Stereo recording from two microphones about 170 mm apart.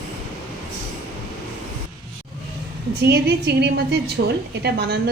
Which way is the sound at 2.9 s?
75° right (ahead or behind).